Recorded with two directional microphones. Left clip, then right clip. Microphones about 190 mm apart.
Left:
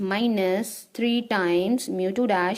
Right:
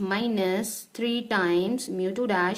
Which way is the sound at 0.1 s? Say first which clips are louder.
Left 3 dB; 30° left (ahead or behind).